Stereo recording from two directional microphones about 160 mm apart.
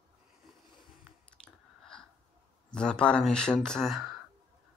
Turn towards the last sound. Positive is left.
turn(degrees=0)  # may be behind; listen again after turning